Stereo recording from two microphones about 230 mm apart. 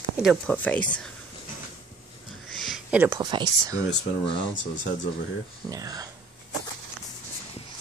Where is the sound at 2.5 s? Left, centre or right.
Centre.